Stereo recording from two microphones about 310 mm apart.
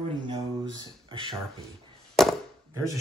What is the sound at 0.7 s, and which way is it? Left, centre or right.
Speech, centre.